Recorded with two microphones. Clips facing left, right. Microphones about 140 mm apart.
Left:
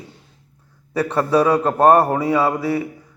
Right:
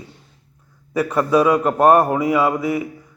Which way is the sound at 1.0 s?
30° left (ahead or behind).